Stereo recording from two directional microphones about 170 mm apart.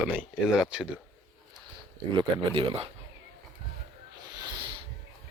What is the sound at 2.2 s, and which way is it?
Speech, 30° right (ahead or behind).